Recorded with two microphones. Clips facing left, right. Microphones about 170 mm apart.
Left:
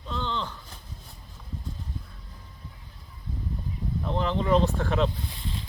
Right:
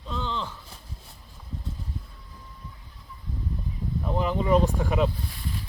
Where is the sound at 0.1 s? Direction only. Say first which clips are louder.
Even; centre (ahead or behind).